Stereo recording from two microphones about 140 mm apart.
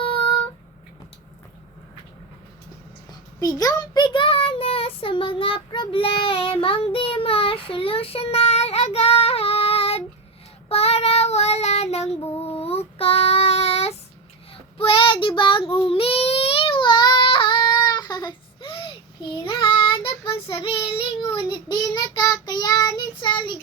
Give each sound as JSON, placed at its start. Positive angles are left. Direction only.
{"t": 3.1, "sound": "a child's voice", "side_deg": 25}
{"t": 10.7, "sound": "child singing", "side_deg": 45}